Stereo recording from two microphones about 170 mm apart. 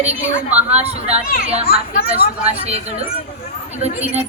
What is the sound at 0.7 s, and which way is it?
Speech, 40° right (ahead or behind).